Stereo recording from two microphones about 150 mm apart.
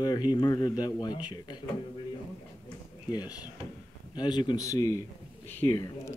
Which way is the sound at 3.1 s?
25° left (ahead or behind).